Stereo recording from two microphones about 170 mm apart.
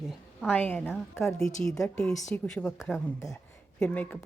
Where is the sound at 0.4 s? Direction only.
10° left (ahead or behind).